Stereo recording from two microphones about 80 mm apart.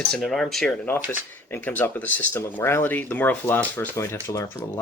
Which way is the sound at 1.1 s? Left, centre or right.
Left.